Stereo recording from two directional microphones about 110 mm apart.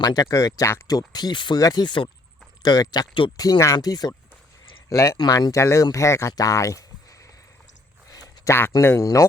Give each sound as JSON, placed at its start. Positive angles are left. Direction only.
{"t": 0.0, "sound": "speech", "side_deg": 35}
{"t": 4.9, "sound": "speech", "side_deg": 25}
{"t": 5.1, "sound": "speech", "side_deg": 40}
{"t": 8.1, "sound": "a sound", "side_deg": 35}
{"t": 8.7, "sound": "speech", "side_deg": 25}